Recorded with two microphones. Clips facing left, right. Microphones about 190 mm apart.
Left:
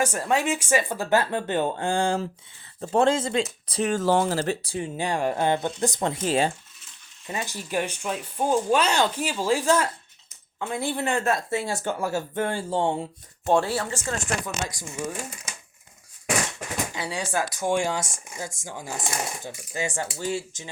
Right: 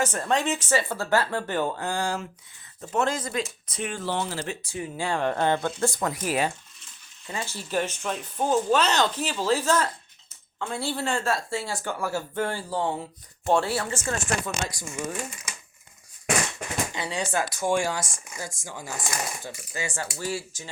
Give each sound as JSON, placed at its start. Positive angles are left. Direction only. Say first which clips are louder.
{"t": 0.0, "sound": "speech", "louder": "left 1 dB", "side_deg": 10}
{"t": 3.7, "sound": "speech", "louder": "left 8 dB", "side_deg": 35}
{"t": 4.9, "sound": "speech", "louder": "even", "side_deg": 15}
{"t": 7.3, "sound": "speech", "louder": "left 2 dB", "side_deg": 15}
{"t": 16.9, "sound": "speech", "louder": "even", "side_deg": 10}